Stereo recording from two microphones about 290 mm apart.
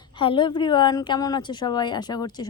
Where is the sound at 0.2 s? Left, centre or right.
Centre.